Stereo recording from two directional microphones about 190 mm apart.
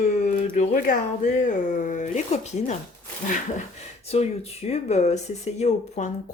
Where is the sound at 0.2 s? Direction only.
40° left (ahead or behind).